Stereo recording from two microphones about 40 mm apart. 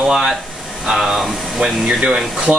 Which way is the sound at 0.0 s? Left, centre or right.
Centre.